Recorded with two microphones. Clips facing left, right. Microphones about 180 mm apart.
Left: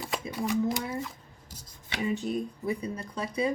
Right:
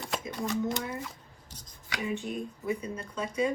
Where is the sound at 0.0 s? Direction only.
5° left (ahead or behind).